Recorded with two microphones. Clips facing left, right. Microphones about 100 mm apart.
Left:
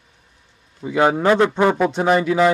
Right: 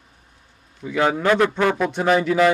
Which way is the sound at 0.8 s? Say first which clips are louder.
Left 3 dB; 20° left (ahead or behind).